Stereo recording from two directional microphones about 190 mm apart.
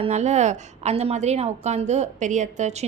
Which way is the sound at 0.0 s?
35° right (ahead or behind).